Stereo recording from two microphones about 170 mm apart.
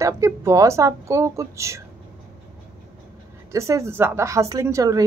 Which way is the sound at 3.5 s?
15° right (ahead or behind).